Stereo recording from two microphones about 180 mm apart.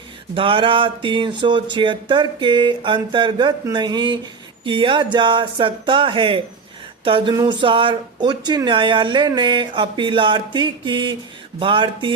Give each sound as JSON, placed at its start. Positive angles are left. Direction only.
{"t": 0.3, "sound": "speech", "side_deg": -30}